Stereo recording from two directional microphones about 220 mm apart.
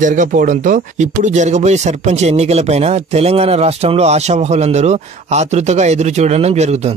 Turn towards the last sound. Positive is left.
turn(degrees=-30)  # may be behind; listen again after turning